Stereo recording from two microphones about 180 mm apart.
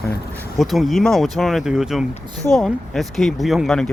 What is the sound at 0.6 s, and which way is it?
Speech, centre (ahead or behind).